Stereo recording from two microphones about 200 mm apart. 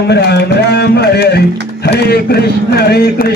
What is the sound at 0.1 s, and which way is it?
A man's voice, 55° left (ahead or behind).